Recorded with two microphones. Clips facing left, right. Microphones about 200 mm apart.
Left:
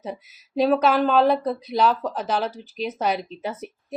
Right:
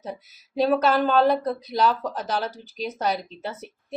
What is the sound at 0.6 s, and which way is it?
A woman's voice, centre (ahead or behind).